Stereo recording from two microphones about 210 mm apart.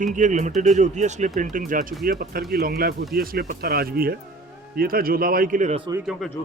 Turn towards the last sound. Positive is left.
turn(degrees=0)  # may be behind; listen again after turning